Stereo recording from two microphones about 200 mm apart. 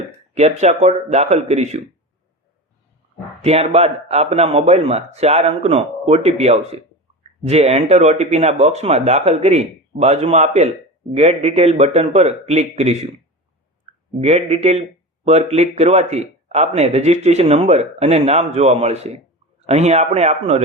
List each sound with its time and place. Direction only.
0.3 s speech: 35° right (ahead or behind)
3.4 s speech: 30° right (ahead or behind)
14.2 s speech: 30° right (ahead or behind)